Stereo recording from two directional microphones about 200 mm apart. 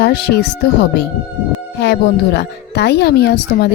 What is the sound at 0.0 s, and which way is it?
Speech, 55° left (ahead or behind).